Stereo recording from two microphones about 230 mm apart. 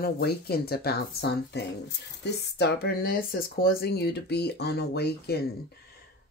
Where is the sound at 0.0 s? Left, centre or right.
Left.